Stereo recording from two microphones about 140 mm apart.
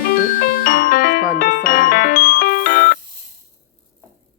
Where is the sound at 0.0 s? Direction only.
90° left.